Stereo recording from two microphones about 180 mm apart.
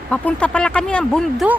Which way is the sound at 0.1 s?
5° left (ahead or behind).